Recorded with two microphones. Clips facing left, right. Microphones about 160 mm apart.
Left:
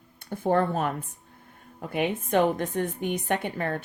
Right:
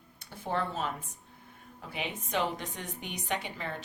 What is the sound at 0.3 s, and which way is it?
A woman's voice, 50° left (ahead or behind).